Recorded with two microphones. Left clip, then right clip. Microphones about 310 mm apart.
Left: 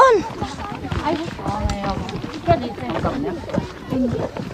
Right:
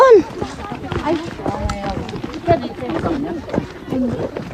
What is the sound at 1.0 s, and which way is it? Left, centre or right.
Run, centre.